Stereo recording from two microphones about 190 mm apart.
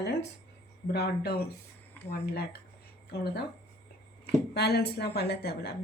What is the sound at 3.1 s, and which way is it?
Speech, 60° left (ahead or behind).